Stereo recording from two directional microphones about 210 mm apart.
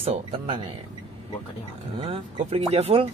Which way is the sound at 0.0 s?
30° right (ahead or behind).